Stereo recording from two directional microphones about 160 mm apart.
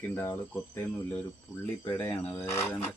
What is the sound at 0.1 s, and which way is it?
Speech, 15° left (ahead or behind).